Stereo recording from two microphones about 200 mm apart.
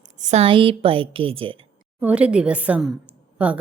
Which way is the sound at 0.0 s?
35° right (ahead or behind).